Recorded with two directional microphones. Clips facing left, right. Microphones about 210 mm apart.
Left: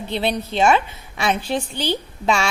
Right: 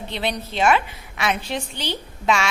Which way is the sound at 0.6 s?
30° left (ahead or behind).